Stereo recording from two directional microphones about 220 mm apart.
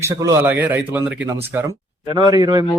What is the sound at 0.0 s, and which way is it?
Speech, 15° right (ahead or behind).